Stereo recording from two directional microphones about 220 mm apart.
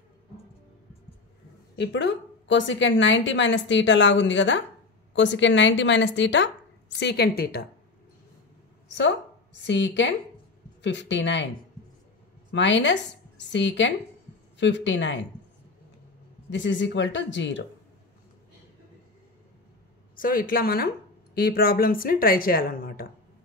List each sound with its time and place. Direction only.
1.8 s a woman's voice: 50° left (ahead or behind)
9.7 s a woman's voice: 55° left (ahead or behind)
12.4 s a woman's voice: 55° left (ahead or behind)
16.4 s a woman's voice: 55° left (ahead or behind)
20.2 s a woman's voice: 40° left (ahead or behind)